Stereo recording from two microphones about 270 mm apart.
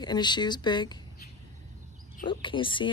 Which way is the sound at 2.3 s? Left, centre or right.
Centre.